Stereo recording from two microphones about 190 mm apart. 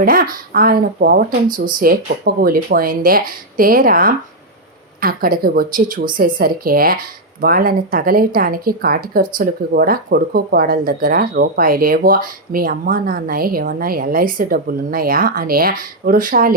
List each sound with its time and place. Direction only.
0.0 s speech: 50° right (ahead or behind)